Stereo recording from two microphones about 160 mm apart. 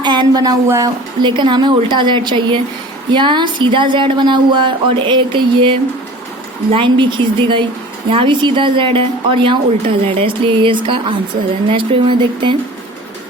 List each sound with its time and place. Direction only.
0.0 s a woman's voice: 25° right (ahead or behind)
6.7 s speech: 30° right (ahead or behind)